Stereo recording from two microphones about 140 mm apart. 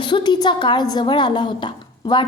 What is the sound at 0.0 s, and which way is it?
A woman's voice, 35° left (ahead or behind).